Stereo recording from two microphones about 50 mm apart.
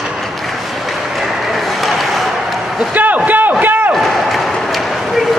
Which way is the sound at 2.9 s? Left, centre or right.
Right.